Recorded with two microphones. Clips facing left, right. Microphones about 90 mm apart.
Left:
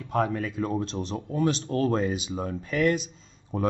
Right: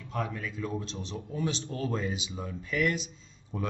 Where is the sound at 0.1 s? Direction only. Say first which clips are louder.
Left 8 dB; 50° left (ahead or behind).